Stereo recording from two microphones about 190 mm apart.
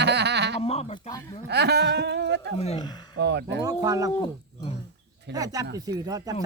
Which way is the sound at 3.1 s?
65° right (ahead or behind).